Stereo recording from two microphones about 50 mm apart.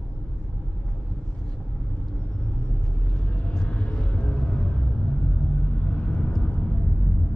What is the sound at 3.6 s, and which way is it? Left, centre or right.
Music, left.